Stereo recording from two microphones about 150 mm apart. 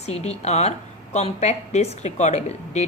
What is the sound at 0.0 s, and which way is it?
A woman's voice, 45° left (ahead or behind).